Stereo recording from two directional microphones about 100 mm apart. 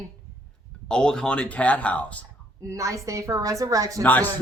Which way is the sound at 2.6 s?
35° right (ahead or behind).